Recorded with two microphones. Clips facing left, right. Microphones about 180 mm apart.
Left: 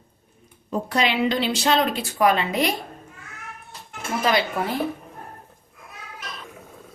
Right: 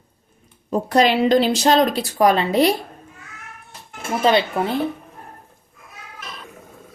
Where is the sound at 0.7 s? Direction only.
40° right (ahead or behind).